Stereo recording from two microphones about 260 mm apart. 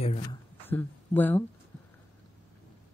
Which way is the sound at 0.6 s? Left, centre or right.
Centre.